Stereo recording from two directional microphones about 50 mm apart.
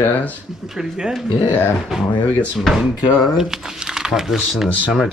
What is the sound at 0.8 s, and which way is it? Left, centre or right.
Speech, centre.